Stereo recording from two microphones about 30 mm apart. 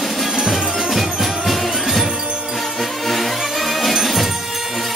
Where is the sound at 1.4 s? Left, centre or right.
Centre.